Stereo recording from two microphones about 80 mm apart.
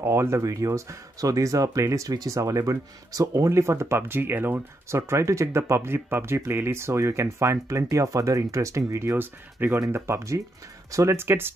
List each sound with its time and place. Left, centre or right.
0.0 s speech: right
5.1 s speech: right